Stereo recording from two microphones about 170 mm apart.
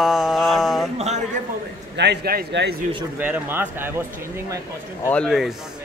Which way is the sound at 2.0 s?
75° right (ahead or behind).